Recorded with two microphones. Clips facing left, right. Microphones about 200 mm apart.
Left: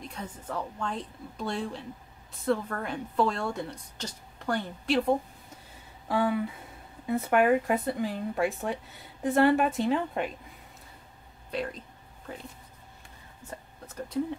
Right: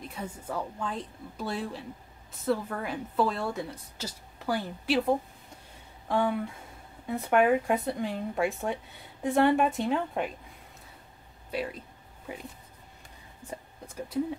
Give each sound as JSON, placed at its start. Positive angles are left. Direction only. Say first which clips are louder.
{"t": 0.0, "sound": "speech", "louder": "right 1 dB", "side_deg": -5}
{"t": 11.5, "sound": "speech", "louder": "even", "side_deg": -5}
{"t": 13.5, "sound": "a sound", "louder": "right 2 dB", "side_deg": -10}